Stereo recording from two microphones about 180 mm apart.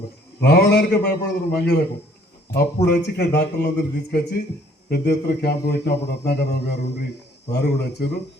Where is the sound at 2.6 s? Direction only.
65° left (ahead or behind).